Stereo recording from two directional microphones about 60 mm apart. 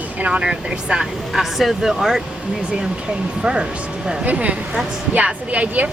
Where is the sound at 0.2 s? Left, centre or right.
Right.